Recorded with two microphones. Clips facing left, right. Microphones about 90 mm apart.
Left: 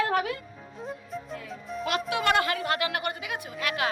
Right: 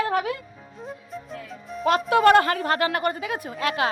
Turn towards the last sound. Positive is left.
turn(degrees=-35)  # may be behind; listen again after turning